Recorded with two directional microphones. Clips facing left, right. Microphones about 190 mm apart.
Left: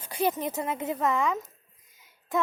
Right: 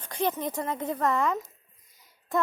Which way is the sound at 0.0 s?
10° left (ahead or behind).